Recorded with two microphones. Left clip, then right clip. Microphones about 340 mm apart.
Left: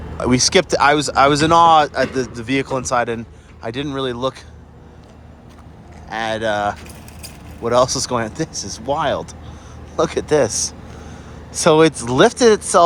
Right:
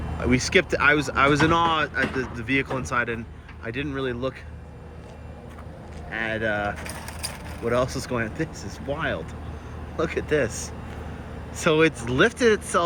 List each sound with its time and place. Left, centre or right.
0.2 s speech: centre
6.1 s speech: centre
6.8 s keys jangling: right
7.7 s speech: centre